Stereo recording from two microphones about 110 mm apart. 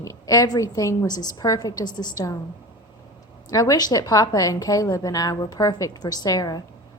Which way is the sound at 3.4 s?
35° left (ahead or behind).